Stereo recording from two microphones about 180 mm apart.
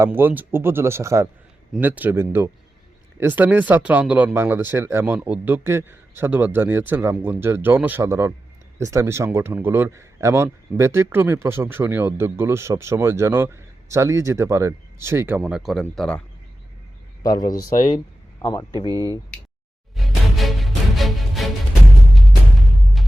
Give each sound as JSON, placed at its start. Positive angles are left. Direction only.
{"t": 0.0, "sound": "speech", "side_deg": -10}
{"t": 15.4, "sound": "speech", "side_deg": 0}
{"t": 17.2, "sound": "speech", "side_deg": 20}
{"t": 18.9, "sound": "speech", "side_deg": -20}
{"t": 20.0, "sound": "music", "side_deg": 0}